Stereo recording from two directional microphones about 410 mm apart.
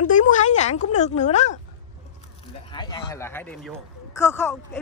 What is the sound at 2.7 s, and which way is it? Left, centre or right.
A man's voice, centre.